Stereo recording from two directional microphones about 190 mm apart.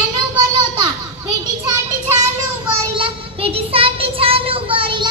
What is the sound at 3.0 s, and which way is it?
Child singing, 30° right (ahead or behind).